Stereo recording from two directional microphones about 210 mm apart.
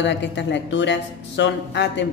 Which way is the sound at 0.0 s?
55° left (ahead or behind).